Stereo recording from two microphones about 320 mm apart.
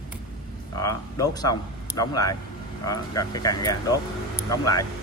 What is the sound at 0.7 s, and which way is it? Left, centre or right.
A man's voice, centre.